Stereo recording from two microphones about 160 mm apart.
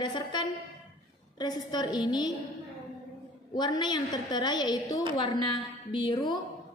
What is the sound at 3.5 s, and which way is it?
A woman's voice, 25° left (ahead or behind).